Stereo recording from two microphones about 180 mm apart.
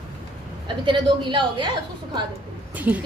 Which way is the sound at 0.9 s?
25° right (ahead or behind).